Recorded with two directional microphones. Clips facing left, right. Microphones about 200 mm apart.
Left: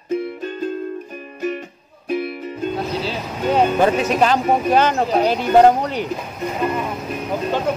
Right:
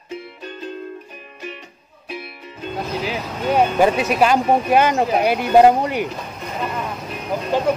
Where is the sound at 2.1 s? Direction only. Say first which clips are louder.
Left 10 dB; 45° left (ahead or behind).